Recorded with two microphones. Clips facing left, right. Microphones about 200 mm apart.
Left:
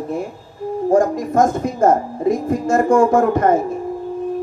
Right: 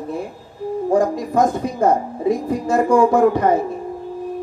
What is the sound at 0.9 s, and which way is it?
A woman's voice, 45° left (ahead or behind).